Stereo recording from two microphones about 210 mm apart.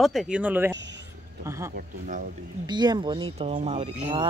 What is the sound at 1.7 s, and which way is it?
Speech, 40° right (ahead or behind).